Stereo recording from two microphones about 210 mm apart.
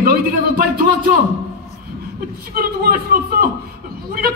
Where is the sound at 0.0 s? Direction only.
45° right (ahead or behind).